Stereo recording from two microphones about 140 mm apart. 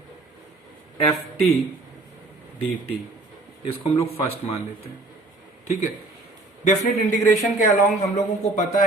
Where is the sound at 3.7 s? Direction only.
45° left (ahead or behind).